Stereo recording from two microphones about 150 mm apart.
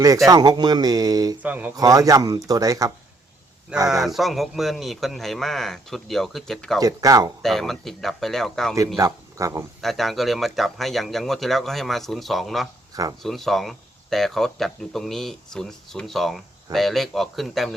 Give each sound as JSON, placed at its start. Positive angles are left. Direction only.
{"t": 0.3, "sound": "speech", "side_deg": -30}
{"t": 1.4, "sound": "speech", "side_deg": -10}
{"t": 1.7, "sound": "speech", "side_deg": -25}
{"t": 3.8, "sound": "speech", "side_deg": 0}
{"t": 6.7, "sound": "speech", "side_deg": -25}
{"t": 7.4, "sound": "speech", "side_deg": 0}
{"t": 9.0, "sound": "a man's voice", "side_deg": -20}
{"t": 9.8, "sound": "speech", "side_deg": 0}
{"t": 12.9, "sound": "speech", "side_deg": -25}
{"t": 13.2, "sound": "speech", "side_deg": 0}